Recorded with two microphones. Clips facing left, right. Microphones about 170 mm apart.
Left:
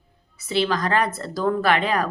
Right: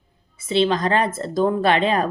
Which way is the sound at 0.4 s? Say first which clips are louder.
Right 3 dB; 25° right (ahead or behind).